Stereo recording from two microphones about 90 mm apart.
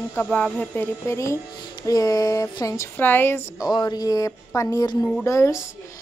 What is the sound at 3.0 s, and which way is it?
Speech, 25° left (ahead or behind).